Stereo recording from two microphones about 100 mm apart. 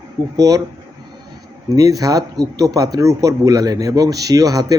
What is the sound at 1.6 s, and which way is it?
A man's voice, 40° right (ahead or behind).